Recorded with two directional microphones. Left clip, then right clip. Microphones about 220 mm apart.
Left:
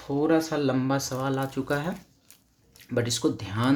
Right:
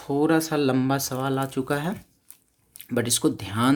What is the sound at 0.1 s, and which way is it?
Speech, 45° right (ahead or behind).